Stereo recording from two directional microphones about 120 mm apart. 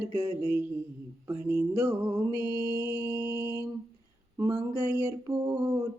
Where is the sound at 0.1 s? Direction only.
20° right (ahead or behind).